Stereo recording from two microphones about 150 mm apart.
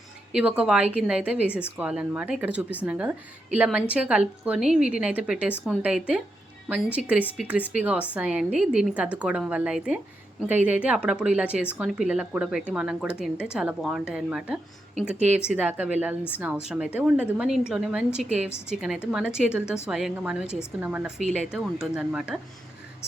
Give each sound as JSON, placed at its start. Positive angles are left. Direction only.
{"t": 0.3, "sound": "a woman's voice", "side_deg": -5}